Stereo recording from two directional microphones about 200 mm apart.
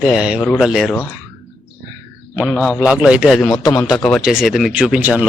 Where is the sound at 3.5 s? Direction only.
20° left (ahead or behind).